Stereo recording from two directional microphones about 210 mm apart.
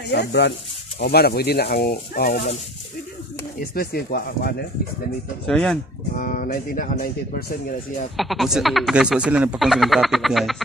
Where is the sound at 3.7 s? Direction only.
45° left (ahead or behind).